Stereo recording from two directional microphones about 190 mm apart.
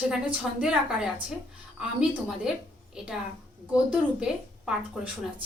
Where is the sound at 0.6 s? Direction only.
5° right (ahead or behind).